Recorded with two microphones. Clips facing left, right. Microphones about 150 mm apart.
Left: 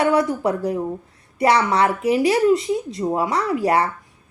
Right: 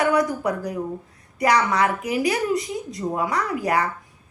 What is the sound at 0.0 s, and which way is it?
A woman's voice, 25° left (ahead or behind).